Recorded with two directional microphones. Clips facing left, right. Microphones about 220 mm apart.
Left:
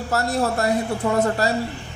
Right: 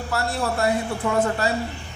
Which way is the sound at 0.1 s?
40° left (ahead or behind).